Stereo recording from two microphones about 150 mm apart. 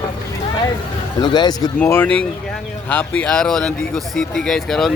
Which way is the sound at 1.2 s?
30° left (ahead or behind).